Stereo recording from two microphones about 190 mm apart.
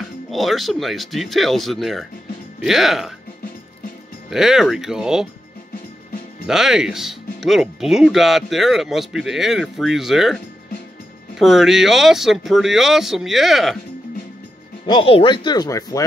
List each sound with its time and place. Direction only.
0.3 s speech: centre (ahead or behind)
4.3 s speech: centre (ahead or behind)
6.4 s speech: 5° right (ahead or behind)
14.9 s speech: 30° left (ahead or behind)